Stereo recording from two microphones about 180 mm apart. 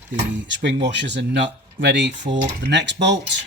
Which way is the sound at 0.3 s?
80° right.